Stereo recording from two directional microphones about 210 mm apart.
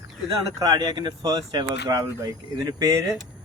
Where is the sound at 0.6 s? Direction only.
20° right (ahead or behind).